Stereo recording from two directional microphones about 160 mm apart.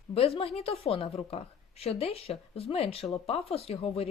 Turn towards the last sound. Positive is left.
turn(degrees=40)  # may be behind; listen again after turning